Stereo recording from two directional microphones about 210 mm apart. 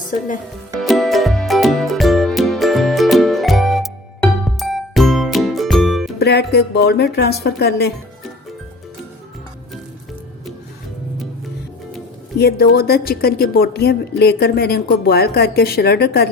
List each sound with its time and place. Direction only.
0.8 s music: centre (ahead or behind)
6.1 s a woman's voice: 50° left (ahead or behind)
12.4 s a woman's voice: 50° left (ahead or behind)